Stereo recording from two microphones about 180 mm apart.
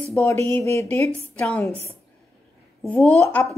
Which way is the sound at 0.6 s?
15° left (ahead or behind).